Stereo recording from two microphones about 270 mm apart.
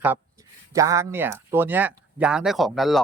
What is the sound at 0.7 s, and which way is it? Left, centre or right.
Speech, centre.